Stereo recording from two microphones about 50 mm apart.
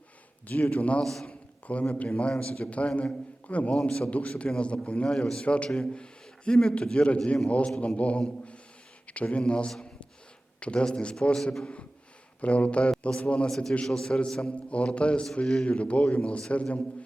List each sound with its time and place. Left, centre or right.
0.4 s a man's voice: left
1.0 s a man's voice: centre
1.3 s a man's voice: left
3.8 s a man's voice: centre
4.1 s a man's voice: left
13.5 s a man's voice: centre